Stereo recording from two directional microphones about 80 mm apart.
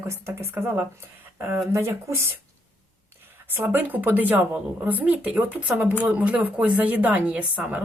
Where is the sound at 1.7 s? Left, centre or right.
Right.